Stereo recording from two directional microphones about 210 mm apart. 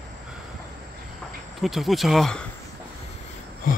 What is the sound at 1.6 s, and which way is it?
Speech, centre (ahead or behind).